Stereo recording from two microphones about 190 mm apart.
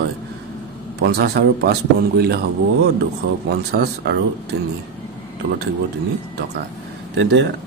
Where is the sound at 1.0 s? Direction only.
60° right (ahead or behind).